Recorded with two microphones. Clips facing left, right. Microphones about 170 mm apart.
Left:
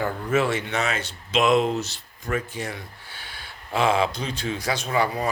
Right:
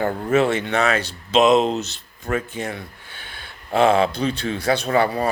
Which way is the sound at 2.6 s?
55° right (ahead or behind).